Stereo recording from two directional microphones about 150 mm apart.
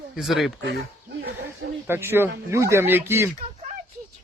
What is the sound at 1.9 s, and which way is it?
Speech, 15° right (ahead or behind).